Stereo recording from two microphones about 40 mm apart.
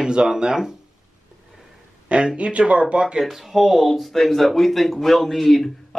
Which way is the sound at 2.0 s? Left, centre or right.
Right.